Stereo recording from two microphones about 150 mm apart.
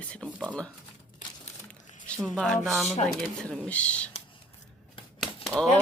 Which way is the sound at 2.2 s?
5° left (ahead or behind).